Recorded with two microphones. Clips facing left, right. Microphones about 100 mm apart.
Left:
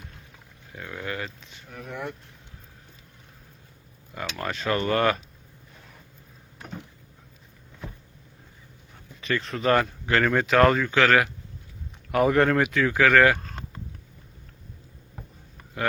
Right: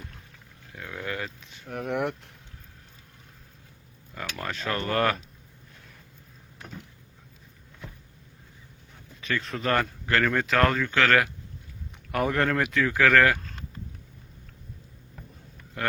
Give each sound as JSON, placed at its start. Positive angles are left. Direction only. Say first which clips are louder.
{"t": 0.8, "sound": "a sound", "louder": "left 1 dB", "side_deg": 0}
{"t": 1.9, "sound": "speech", "louder": "right 6 dB", "side_deg": -70}
{"t": 4.1, "sound": "speech", "louder": "left 3 dB", "side_deg": 5}
{"t": 9.2, "sound": "speech", "louder": "left 4 dB", "side_deg": 0}
{"t": 13.4, "sound": "vehicle", "louder": "left 2 dB", "side_deg": 50}
{"t": 15.8, "sound": "a sound", "louder": "left 3 dB", "side_deg": 5}